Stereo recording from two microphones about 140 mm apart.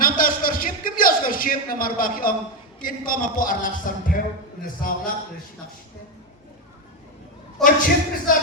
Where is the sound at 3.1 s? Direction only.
80° left.